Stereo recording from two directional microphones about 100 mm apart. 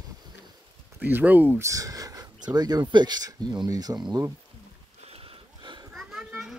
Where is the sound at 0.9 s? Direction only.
20° right (ahead or behind).